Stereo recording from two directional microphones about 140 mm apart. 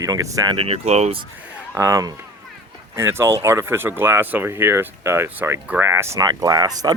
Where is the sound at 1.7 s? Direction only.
20° right (ahead or behind).